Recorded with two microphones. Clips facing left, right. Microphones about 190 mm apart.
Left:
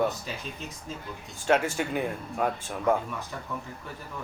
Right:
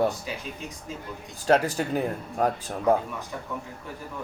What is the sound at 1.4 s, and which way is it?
Speech, 35° right (ahead or behind).